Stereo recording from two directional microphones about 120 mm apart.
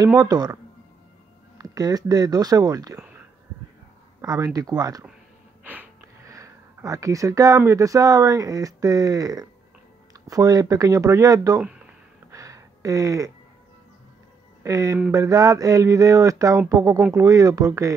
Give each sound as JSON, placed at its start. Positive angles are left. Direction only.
{"t": 0.2, "sound": "speech", "side_deg": -35}
{"t": 1.6, "sound": "speech", "side_deg": -30}
{"t": 3.0, "sound": "a sound", "side_deg": -15}
{"t": 4.2, "sound": "speech", "side_deg": -30}
{"t": 5.6, "sound": "wheeze", "side_deg": -15}
{"t": 6.2, "sound": "speech", "side_deg": -25}
{"t": 10.1, "sound": "a sound", "side_deg": -30}
{"t": 14.6, "sound": "speech", "side_deg": -30}
{"t": 15.0, "sound": "a sound", "side_deg": -30}